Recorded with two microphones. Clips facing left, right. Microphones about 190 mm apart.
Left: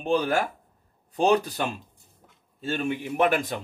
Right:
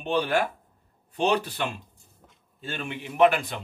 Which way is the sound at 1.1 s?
40° left (ahead or behind).